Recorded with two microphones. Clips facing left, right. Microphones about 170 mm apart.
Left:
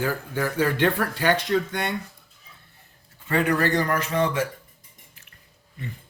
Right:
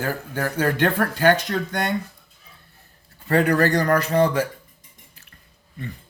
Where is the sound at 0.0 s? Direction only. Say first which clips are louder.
Even; 45° right (ahead or behind).